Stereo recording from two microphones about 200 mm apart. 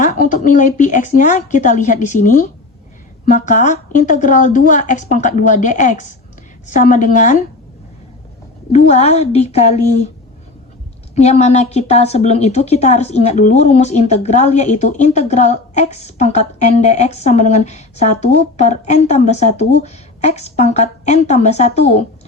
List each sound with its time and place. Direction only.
0.0 s a woman's voice: 40° left (ahead or behind)
8.7 s a woman's voice: 35° left (ahead or behind)
11.1 s a woman's voice: 35° left (ahead or behind)